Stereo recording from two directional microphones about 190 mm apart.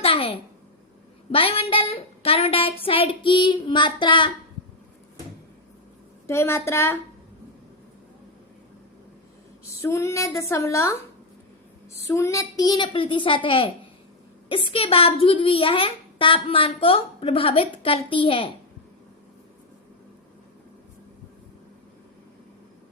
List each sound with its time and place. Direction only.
0.0 s a sound: 30° left (ahead or behind)
1.3 s a child's voice: 30° left (ahead or behind)
6.2 s speech: 15° left (ahead or behind)
9.8 s speech: 15° left (ahead or behind)
12.0 s a child's voice: 15° left (ahead or behind)